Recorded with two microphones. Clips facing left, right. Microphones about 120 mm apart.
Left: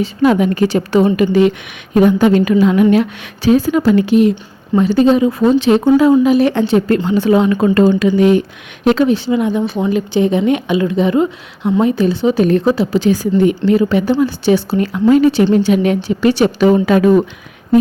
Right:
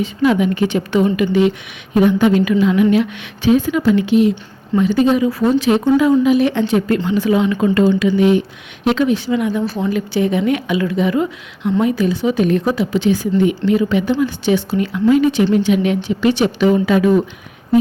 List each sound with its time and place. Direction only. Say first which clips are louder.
0.0 s a woman's voice: left 3 dB; 45° left (ahead or behind)
4.8 s speech: left 3 dB; 35° left (ahead or behind)
5.8 s a woman's voice: left 3 dB; 35° left (ahead or behind)